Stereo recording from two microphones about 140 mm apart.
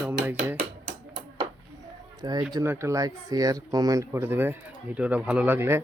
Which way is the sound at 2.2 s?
30° right (ahead or behind).